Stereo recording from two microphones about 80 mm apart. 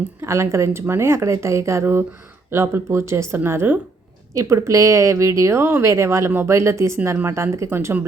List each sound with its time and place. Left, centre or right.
0.2 s speech: right